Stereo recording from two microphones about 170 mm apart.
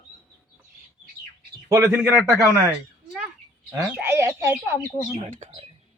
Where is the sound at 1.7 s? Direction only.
10° right (ahead or behind).